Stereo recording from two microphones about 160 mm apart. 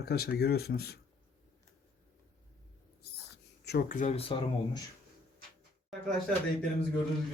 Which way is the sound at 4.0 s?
45° left (ahead or behind).